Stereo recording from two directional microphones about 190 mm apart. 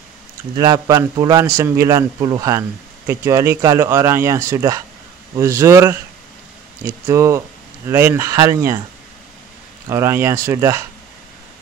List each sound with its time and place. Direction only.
0.6 s speech: 20° right (ahead or behind)
7.1 s speech: 15° right (ahead or behind)
9.8 s speech: 15° right (ahead or behind)